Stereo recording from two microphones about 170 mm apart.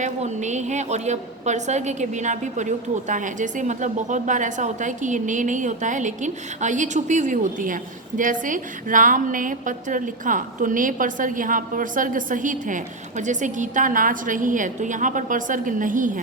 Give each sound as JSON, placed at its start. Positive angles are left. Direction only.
{"t": 0.0, "sound": "a woman's voice", "side_deg": -45}